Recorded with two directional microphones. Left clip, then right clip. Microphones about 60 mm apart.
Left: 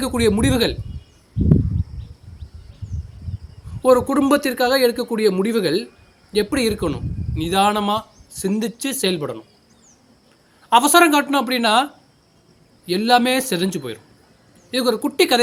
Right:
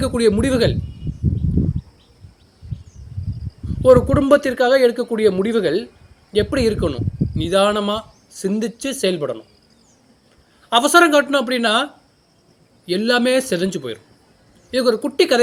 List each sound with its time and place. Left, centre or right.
0.0 s speech: left
4.1 s speech: left
10.7 s speech: left